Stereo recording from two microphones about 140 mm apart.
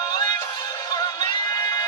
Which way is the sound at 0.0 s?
30° left (ahead or behind).